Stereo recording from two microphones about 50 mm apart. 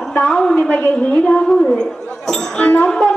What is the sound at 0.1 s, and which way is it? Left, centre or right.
Speech, centre.